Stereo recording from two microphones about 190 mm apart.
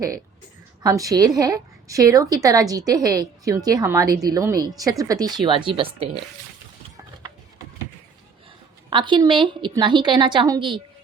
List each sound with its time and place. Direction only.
0.8 s a woman's voice: 20° right (ahead or behind)
8.9 s a woman's voice: 25° right (ahead or behind)